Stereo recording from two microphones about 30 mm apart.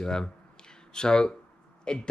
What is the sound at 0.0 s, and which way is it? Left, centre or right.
Speech, left.